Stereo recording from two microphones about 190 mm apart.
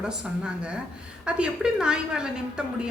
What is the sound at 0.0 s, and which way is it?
A woman's voice, 5° right (ahead or behind).